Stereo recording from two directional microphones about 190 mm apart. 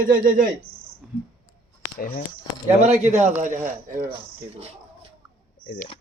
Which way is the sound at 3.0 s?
35° right (ahead or behind).